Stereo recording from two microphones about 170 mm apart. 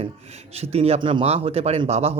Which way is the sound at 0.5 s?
35° right (ahead or behind).